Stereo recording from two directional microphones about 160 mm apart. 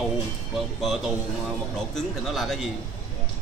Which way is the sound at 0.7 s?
Centre (ahead or behind).